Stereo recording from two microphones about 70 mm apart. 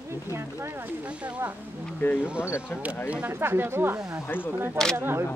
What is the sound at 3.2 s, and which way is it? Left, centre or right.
Speech, right.